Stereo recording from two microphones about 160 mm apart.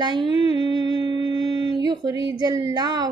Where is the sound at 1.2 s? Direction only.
35° left (ahead or behind).